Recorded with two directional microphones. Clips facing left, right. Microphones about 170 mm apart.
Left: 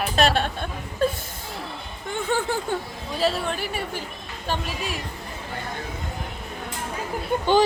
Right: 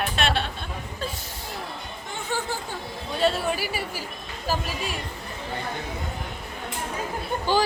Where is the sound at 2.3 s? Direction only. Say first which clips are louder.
Left 4 dB; 55° left (ahead or behind).